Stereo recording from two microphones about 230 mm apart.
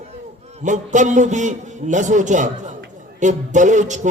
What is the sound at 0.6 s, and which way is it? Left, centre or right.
A man's voice, right.